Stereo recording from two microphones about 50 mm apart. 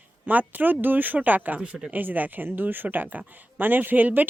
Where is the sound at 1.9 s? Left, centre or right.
Right.